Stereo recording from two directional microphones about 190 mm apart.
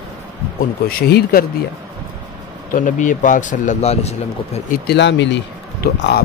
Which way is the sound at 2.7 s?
45° left (ahead or behind).